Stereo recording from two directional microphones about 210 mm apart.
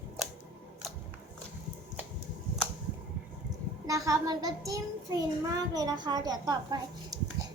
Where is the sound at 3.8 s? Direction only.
15° right (ahead or behind).